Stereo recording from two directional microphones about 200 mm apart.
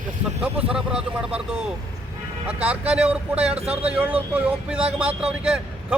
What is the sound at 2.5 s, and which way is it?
A man's voice, 5° right (ahead or behind).